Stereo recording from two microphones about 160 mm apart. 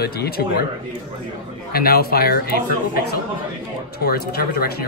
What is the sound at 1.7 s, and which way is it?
Speech, 75° left (ahead or behind).